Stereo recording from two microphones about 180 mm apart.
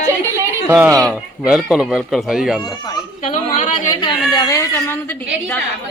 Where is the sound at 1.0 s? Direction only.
Centre (ahead or behind).